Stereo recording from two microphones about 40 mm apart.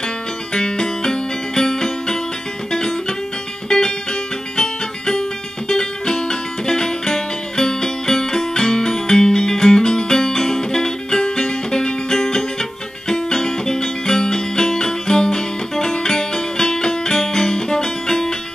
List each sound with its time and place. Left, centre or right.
0.6 s music: centre
3.6 s music: centre